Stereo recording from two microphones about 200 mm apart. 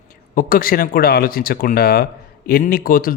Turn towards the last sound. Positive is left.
turn(degrees=45)  # may be behind; listen again after turning